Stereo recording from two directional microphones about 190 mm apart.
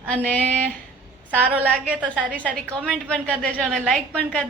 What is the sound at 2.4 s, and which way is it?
A woman's voice, 5° left (ahead or behind).